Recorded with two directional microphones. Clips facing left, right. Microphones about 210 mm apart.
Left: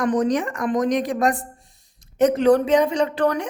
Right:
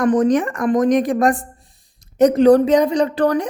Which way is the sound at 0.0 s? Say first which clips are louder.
Right 5 dB; 50° right (ahead or behind).